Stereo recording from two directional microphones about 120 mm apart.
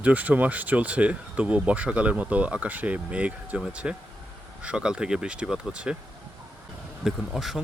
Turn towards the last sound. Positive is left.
turn(degrees=0)  # may be behind; listen again after turning